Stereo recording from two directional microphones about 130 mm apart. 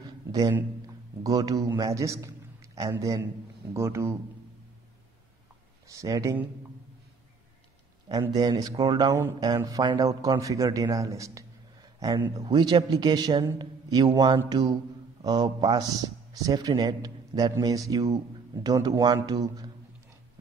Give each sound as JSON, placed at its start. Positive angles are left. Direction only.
{"t": 0.0, "sound": "a sound", "side_deg": -30}
{"t": 1.8, "sound": "a man's voice", "side_deg": -25}
{"t": 5.9, "sound": "a man's voice", "side_deg": -25}
{"t": 8.1, "sound": "a man's voice", "side_deg": -30}